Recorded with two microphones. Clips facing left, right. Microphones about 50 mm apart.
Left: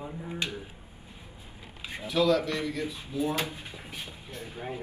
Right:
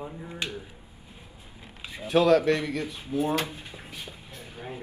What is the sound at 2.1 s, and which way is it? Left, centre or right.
Speech, right.